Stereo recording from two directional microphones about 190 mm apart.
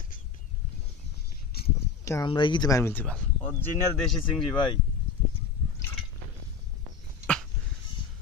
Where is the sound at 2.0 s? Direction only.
15° left (ahead or behind).